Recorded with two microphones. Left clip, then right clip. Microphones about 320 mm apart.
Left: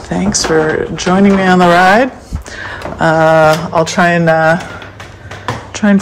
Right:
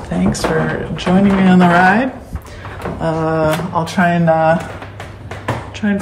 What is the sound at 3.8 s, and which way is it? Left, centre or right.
Speech, left.